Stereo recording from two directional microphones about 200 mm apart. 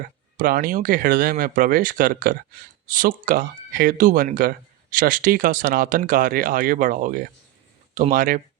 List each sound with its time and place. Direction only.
0.3 s speech: 45° right (ahead or behind)